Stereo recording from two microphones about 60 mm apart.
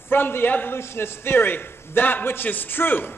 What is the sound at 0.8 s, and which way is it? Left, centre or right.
A man's voice, left.